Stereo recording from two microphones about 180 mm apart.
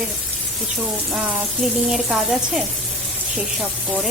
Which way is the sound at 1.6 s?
Centre (ahead or behind).